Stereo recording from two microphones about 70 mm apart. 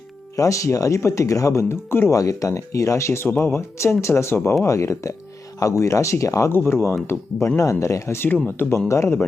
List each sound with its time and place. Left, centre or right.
0.3 s speech: left
2.1 s speech: left
6.5 s speech: left
8.9 s speech: left